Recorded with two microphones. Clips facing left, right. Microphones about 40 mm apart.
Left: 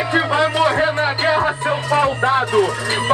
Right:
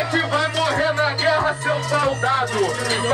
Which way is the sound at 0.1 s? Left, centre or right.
Left.